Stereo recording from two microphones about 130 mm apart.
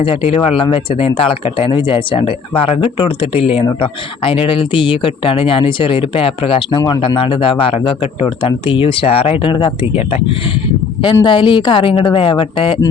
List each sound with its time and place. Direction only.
0.0 s speech: 45° left (ahead or behind)